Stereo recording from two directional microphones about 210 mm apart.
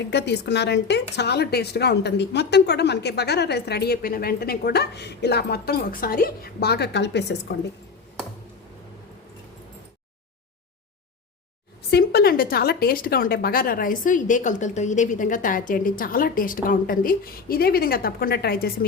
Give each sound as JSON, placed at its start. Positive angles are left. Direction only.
{"t": 0.1, "sound": "speech", "side_deg": 55}
{"t": 11.9, "sound": "speech", "side_deg": 50}